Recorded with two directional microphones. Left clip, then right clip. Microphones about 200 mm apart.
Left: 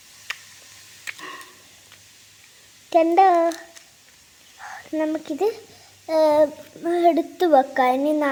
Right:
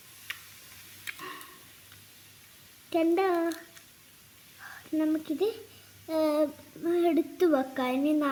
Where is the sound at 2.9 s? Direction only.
15° right (ahead or behind).